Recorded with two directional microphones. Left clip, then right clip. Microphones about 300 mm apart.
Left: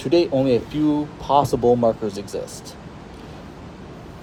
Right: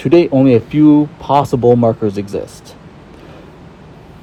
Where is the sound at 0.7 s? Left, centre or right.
Right.